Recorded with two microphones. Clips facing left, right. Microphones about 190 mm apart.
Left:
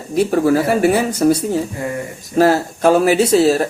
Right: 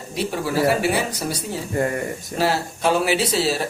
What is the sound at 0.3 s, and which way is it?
Speech, 50° left (ahead or behind).